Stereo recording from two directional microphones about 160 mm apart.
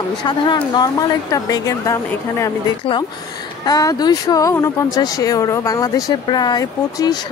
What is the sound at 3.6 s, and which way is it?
Speech, 25° left (ahead or behind).